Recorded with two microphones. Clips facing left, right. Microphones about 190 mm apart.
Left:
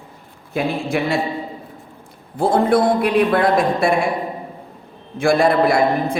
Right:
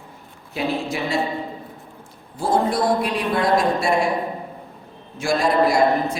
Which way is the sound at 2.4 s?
55° left (ahead or behind).